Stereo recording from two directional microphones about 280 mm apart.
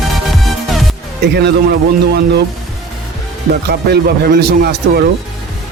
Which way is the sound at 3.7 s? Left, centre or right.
Right.